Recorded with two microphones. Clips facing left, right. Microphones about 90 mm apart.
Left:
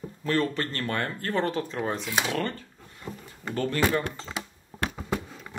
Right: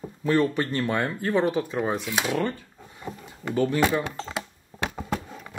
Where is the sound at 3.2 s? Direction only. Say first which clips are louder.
Right 5 dB; 10° right (ahead or behind).